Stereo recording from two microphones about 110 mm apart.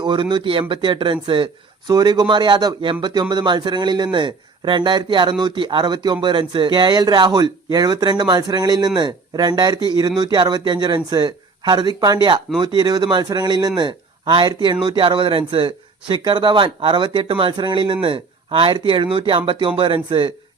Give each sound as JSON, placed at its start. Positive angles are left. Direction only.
{"t": 0.0, "sound": "a man's voice", "side_deg": -45}
{"t": 1.9, "sound": "a man's voice", "side_deg": -40}